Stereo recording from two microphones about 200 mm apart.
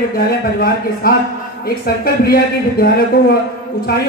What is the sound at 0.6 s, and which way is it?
Speech, 45° left (ahead or behind).